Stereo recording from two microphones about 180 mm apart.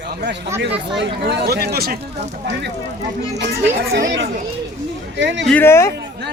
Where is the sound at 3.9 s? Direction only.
80° right.